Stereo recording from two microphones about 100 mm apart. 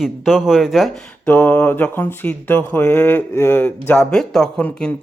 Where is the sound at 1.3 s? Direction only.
15° left (ahead or behind).